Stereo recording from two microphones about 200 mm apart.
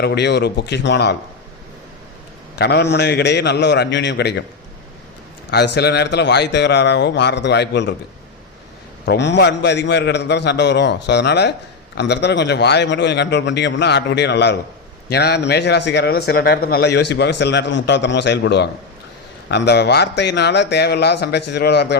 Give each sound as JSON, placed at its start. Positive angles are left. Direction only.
{"t": 0.0, "sound": "a man's voice", "side_deg": 55}
{"t": 2.6, "sound": "a man's voice", "side_deg": 55}
{"t": 5.5, "sound": "a man's voice", "side_deg": 55}
{"t": 9.0, "sound": "a man's voice", "side_deg": 60}